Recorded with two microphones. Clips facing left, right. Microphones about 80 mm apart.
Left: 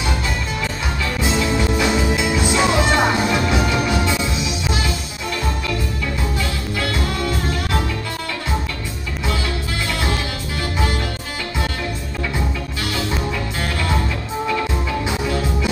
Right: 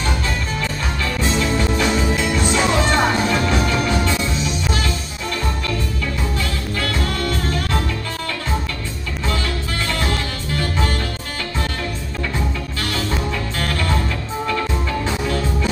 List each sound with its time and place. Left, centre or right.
1.4 s music: centre
6.8 s music: centre
12.9 s music: centre
15.0 s music: centre